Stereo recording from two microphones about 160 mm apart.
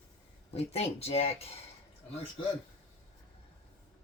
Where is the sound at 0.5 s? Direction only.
40° left (ahead or behind).